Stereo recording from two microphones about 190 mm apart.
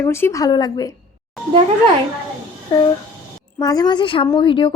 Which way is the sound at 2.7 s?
25° left (ahead or behind).